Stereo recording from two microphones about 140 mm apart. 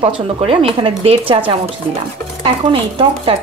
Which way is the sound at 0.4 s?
45° right (ahead or behind).